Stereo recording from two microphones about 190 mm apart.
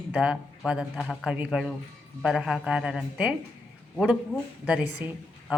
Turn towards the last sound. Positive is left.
turn(degrees=-5)  # may be behind; listen again after turning